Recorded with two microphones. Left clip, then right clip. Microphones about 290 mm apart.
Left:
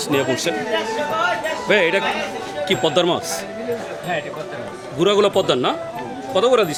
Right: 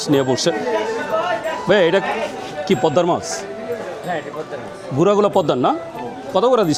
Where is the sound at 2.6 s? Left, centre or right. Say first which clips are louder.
Right 2 dB; right.